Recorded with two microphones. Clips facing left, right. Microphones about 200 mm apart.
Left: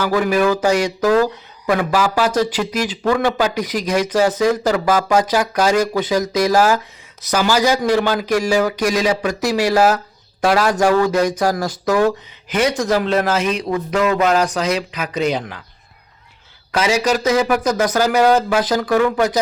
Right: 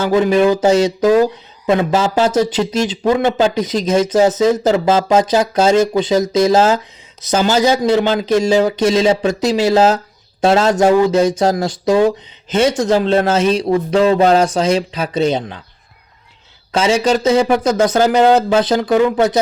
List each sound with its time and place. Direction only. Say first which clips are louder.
0.0 s speech: right 4 dB; 25° right (ahead or behind)
16.7 s speech: right 3 dB; 25° right (ahead or behind)